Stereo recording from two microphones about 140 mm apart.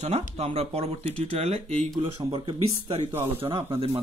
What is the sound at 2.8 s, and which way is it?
Speech, 45° right (ahead or behind).